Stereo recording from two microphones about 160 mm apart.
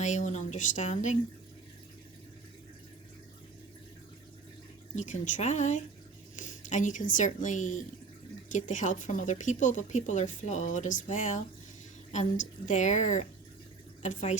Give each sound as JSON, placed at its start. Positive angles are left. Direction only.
{"t": 0.0, "sound": "speech", "side_deg": 50}
{"t": 4.9, "sound": "speech", "side_deg": 50}